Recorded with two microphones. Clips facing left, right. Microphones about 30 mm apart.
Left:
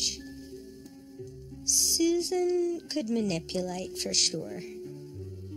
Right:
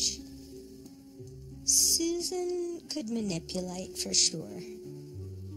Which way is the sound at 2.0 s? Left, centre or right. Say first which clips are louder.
Left 5 dB; left.